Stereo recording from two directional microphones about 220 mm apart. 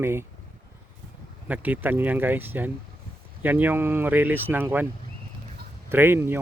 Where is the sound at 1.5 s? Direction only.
10° right (ahead or behind).